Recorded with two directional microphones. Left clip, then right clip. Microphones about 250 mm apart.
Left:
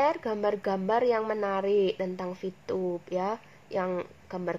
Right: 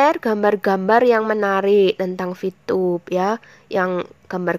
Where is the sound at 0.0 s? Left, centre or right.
Right.